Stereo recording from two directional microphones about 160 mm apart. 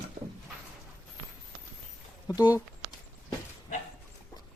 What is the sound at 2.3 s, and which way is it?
Speech, 20° left (ahead or behind).